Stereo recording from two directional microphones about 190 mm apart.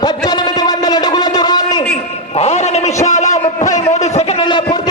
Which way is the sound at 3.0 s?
40° left (ahead or behind).